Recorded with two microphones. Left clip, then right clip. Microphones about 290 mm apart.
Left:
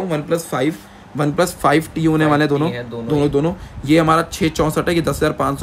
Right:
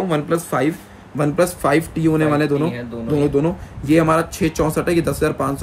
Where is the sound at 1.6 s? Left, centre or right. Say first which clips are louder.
Left 2 dB; centre.